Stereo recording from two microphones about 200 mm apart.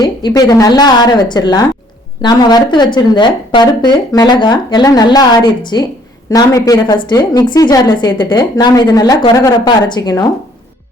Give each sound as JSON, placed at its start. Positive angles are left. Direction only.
{"t": 0.0, "sound": "a woman's voice", "side_deg": 20}